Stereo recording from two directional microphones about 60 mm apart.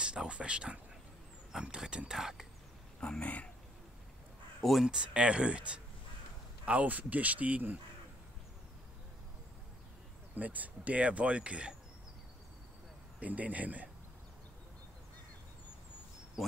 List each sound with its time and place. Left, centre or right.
0.0 s speech: centre
3.0 s speech: centre
4.6 s speech: centre
4.8 s speech: centre
10.3 s speech: right
13.2 s speech: right